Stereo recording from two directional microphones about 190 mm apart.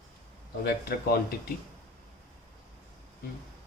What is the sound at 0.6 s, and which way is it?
Speech, 55° left (ahead or behind).